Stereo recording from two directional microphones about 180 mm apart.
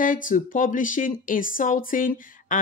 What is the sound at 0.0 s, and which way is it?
Speech, 50° left (ahead or behind).